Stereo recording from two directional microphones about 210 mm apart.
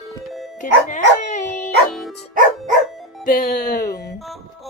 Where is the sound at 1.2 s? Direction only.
35° left (ahead or behind).